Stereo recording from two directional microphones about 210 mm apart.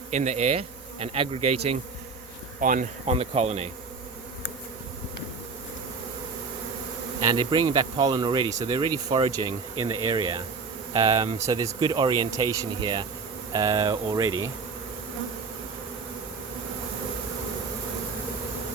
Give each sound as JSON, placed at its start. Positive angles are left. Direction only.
{"t": 0.1, "sound": "speech", "side_deg": -35}
{"t": 2.6, "sound": "speech", "side_deg": -40}
{"t": 7.3, "sound": "speech", "side_deg": -20}